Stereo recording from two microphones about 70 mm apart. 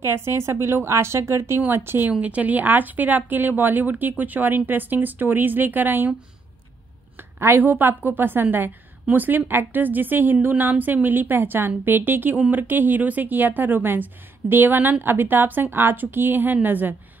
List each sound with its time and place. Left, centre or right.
0.0 s a woman's voice: right
2.0 s a woman's voice: centre
7.3 s a woman's voice: right